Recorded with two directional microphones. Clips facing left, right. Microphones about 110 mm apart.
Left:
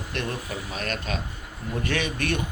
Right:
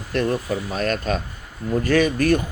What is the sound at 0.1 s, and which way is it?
Speech, 40° right (ahead or behind).